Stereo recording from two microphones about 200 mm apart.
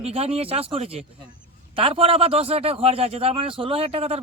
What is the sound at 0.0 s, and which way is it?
A man's voice, 30° right (ahead or behind).